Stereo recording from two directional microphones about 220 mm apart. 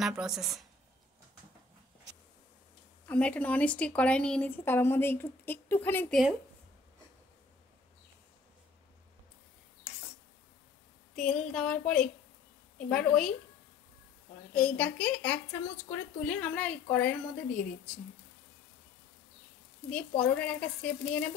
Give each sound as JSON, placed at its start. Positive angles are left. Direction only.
{"t": 0.0, "sound": "speech", "side_deg": 0}
{"t": 3.1, "sound": "a woman's voice", "side_deg": 5}
{"t": 11.1, "sound": "speech", "side_deg": 0}
{"t": 14.8, "sound": "a woman's voice", "side_deg": 5}
{"t": 19.9, "sound": "speech", "side_deg": 5}